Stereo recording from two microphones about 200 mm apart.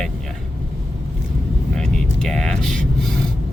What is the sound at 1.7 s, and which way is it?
Vehicle, 5° left (ahead or behind).